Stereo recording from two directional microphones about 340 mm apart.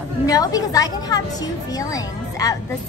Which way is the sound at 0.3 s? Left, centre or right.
Centre.